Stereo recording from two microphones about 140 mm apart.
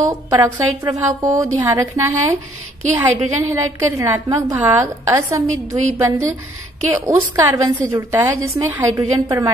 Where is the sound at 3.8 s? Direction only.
20° right (ahead or behind).